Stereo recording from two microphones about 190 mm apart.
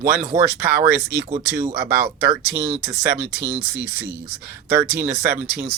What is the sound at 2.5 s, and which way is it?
Speech, 15° right (ahead or behind).